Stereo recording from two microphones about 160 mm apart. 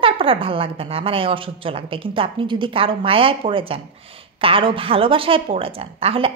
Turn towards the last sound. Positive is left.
turn(degrees=-35)  # may be behind; listen again after turning